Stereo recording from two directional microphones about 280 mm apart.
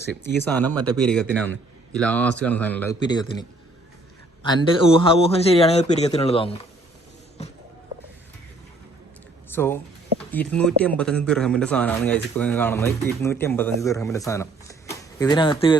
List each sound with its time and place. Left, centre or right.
0.4 s a man's voice: centre
4.4 s a man's voice: centre
9.5 s a man's voice: centre